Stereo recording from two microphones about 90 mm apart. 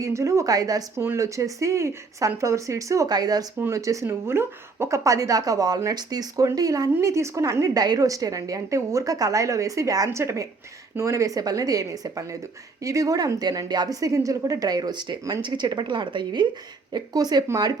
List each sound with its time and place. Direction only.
0.0 s a woman's voice: 35° right (ahead or behind)
0.9 s a woman's voice: 30° right (ahead or behind)
3.1 s speech: 45° right (ahead or behind)
3.6 s a woman's voice: 35° right (ahead or behind); by 16.5 s 60° right (ahead or behind)
16.9 s speech: 50° right (ahead or behind)